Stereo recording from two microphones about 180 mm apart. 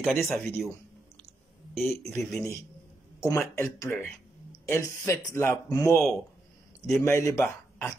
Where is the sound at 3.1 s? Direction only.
15° left (ahead or behind).